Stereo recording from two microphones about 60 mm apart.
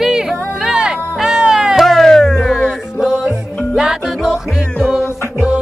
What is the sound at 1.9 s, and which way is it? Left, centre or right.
Music, centre.